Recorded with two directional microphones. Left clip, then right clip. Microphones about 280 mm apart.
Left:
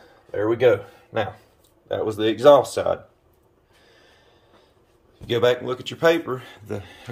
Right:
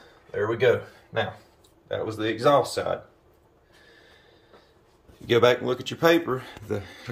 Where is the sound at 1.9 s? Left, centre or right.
Left.